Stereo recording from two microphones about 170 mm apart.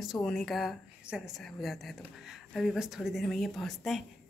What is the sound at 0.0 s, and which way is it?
Speech, centre (ahead or behind).